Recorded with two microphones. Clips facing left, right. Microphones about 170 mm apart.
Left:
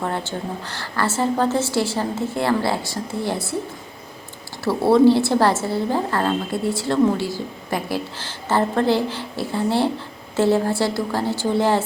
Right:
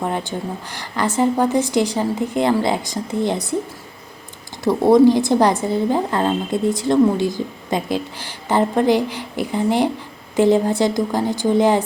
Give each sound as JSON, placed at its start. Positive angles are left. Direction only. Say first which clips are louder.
{"t": 0.0, "sound": "a woman's voice", "louder": "right 2 dB", "side_deg": -15}
{"t": 4.6, "sound": "a woman's voice", "louder": "right 2 dB", "side_deg": -15}